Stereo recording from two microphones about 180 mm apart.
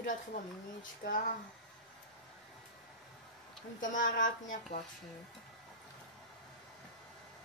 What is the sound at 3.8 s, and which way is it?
Speech, 45° left (ahead or behind).